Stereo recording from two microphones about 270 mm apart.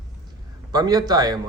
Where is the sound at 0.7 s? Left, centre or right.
Centre.